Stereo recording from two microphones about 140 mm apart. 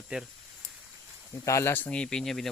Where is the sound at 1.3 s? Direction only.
20° left (ahead or behind); by 2.4 s 5° left (ahead or behind).